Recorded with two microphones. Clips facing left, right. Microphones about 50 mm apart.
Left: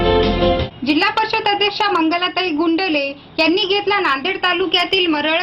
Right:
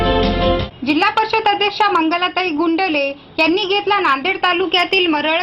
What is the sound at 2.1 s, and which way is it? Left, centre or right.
Speech, right.